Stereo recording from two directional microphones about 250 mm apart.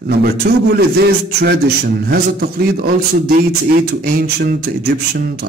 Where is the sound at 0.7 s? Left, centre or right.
Right.